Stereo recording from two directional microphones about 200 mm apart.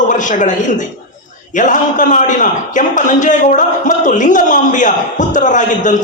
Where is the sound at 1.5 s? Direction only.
40° left (ahead or behind).